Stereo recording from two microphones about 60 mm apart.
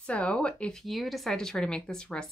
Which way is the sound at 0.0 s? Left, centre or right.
Centre.